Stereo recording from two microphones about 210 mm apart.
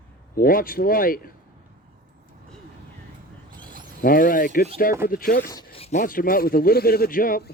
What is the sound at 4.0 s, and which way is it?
A man's voice, 45° left (ahead or behind).